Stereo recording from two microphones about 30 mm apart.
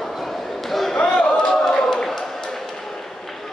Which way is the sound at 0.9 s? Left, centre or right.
Left.